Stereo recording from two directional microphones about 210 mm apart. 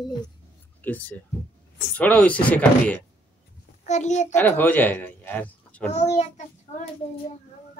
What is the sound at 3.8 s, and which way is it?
Speech, 35° left (ahead or behind).